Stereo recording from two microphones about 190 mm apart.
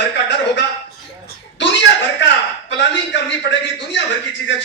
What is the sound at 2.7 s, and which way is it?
A man's voice, 70° left (ahead or behind).